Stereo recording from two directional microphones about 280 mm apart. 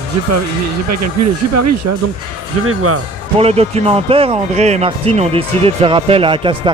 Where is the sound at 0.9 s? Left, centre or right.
Right.